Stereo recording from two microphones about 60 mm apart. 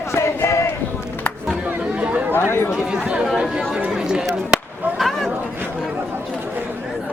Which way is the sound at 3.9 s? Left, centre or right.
Centre.